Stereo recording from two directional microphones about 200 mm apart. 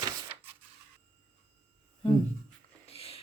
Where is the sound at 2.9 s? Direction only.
30° left (ahead or behind).